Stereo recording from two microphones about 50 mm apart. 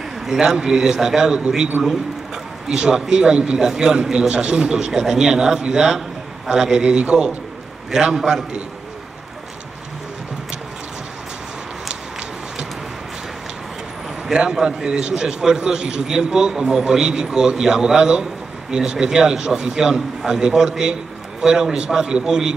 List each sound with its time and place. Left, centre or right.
0.2 s a man's voice: centre
7.9 s a man's voice: centre
14.2 s a man's voice: centre